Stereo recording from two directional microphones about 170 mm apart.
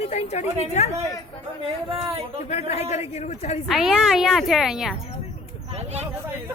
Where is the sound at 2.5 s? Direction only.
40° left (ahead or behind).